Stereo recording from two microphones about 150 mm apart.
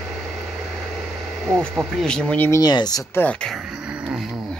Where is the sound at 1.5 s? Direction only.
Centre (ahead or behind).